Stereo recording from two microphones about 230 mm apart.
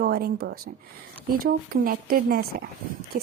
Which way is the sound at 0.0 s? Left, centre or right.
Right.